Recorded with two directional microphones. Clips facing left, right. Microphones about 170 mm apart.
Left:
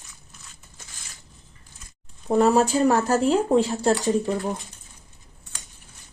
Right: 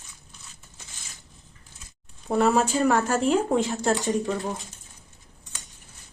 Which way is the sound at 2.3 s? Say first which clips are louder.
Left 3 dB; 40° left (ahead or behind).